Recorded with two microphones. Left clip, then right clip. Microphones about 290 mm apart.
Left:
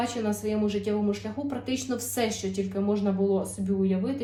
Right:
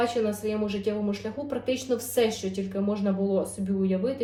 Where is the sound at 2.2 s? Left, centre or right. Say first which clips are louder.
Right 1 dB; centre.